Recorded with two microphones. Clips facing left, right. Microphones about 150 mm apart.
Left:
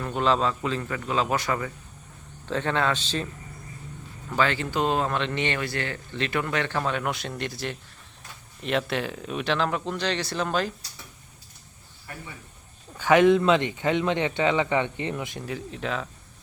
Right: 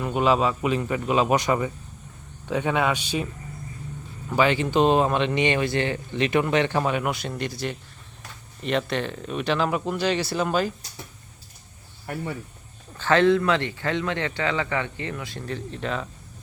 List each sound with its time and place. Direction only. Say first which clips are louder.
0.0 s speech: right 3 dB; 10° right (ahead or behind)
4.3 s speech: right 4 dB; 15° right (ahead or behind)
12.0 s speech: right 10 dB; 65° right (ahead or behind)
13.0 s speech: left 1 dB; 15° left (ahead or behind)
15.4 s speech: right 4 dB; 5° left (ahead or behind)